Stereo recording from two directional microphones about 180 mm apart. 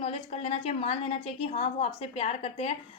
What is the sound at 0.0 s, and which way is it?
A woman's voice, 35° left (ahead or behind).